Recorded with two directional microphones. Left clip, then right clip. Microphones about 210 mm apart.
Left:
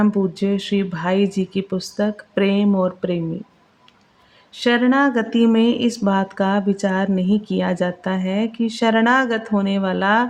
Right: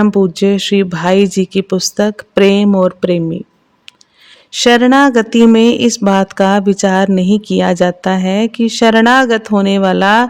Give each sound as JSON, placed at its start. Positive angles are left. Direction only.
{"t": 0.0, "sound": "speech", "side_deg": -50}
{"t": 4.5, "sound": "speech", "side_deg": -55}